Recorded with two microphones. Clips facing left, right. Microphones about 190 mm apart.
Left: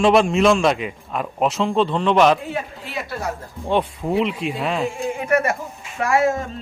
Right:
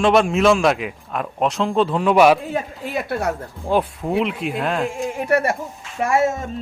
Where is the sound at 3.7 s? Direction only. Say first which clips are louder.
Right 1 dB; centre (ahead or behind).